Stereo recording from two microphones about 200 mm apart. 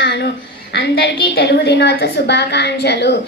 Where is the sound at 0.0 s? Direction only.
55° left (ahead or behind).